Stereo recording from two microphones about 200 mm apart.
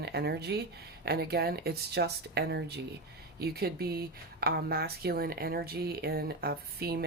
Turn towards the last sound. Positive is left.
turn(degrees=-50)  # may be behind; listen again after turning